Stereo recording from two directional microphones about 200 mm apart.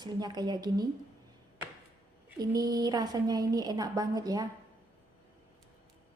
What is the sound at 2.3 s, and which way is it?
A woman's voice, 20° right (ahead or behind).